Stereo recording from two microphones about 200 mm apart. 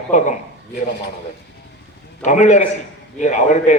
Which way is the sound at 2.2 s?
35° left (ahead or behind).